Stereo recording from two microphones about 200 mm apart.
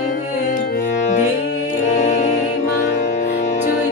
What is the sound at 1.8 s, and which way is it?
Music, 35° left (ahead or behind).